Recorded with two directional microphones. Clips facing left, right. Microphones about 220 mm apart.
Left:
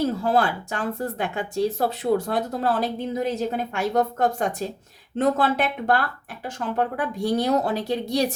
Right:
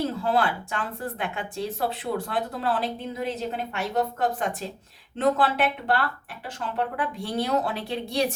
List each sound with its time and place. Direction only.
0.0 s speech: 45° left (ahead or behind)